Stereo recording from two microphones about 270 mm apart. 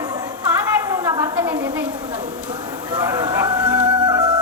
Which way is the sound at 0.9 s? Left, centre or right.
Centre.